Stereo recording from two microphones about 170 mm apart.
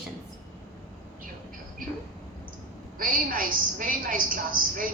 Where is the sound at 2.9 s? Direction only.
55° right (ahead or behind).